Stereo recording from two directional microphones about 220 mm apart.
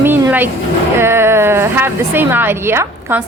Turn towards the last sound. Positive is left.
turn(degrees=-10)  # may be behind; listen again after turning